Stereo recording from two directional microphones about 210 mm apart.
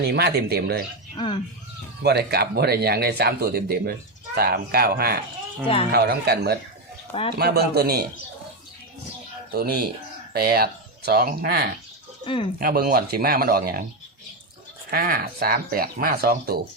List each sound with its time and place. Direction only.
0.1 s speech: 50° right (ahead or behind)
1.1 s speech: 25° left (ahead or behind)
2.0 s speech: 50° right (ahead or behind)
7.1 s a man's voice: 30° left (ahead or behind)
7.3 s speech: 50° right (ahead or behind)
9.5 s speech: 50° right (ahead or behind)
12.2 s speech: 25° left (ahead or behind)
12.5 s speech: 45° right (ahead or behind)
14.8 s speech: 45° right (ahead or behind)